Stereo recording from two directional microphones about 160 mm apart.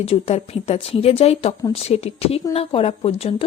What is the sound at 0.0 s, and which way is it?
A woman's voice, 40° left (ahead or behind).